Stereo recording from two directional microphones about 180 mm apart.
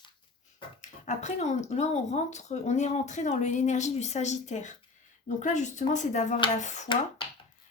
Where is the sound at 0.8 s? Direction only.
40° left (ahead or behind).